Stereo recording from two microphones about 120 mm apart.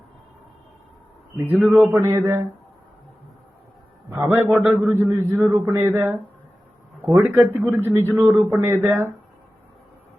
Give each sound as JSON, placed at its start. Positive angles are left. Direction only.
{"t": 1.5, "sound": "a man's voice", "side_deg": -15}
{"t": 4.1, "sound": "a man's voice", "side_deg": -15}